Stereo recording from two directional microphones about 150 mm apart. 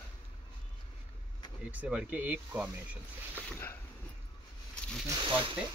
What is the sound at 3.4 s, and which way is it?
Speech, 10° left (ahead or behind).